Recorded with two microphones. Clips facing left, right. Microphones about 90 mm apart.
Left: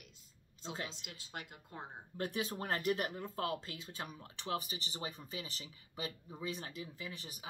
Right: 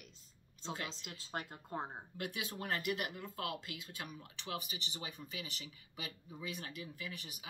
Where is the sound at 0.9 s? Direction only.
35° right (ahead or behind).